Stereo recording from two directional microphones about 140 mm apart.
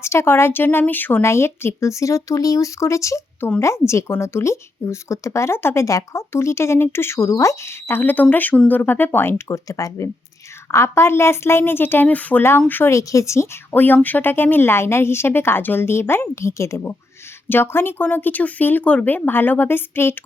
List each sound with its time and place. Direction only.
0.0 s a woman's voice: 20° left (ahead or behind)